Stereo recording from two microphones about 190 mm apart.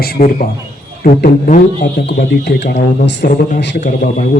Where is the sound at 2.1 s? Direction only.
60° left (ahead or behind).